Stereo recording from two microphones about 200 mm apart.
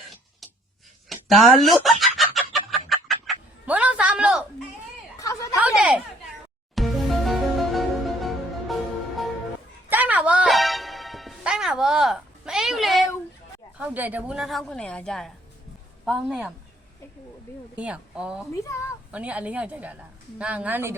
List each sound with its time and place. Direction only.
1.1 s chicken: centre (ahead or behind)
5.2 s a sound: 15° left (ahead or behind)
5.5 s a sound: 5° right (ahead or behind)
6.7 s music: centre (ahead or behind)
9.9 s music: 10° right (ahead or behind)
13.7 s speech: 5° right (ahead or behind)
17.7 s speech: 5° right (ahead or behind)
18.5 s speech: 15° left (ahead or behind)
19.1 s speech: 5° right (ahead or behind)